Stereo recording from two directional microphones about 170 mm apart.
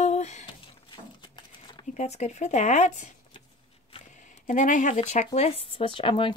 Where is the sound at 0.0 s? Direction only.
40° left (ahead or behind).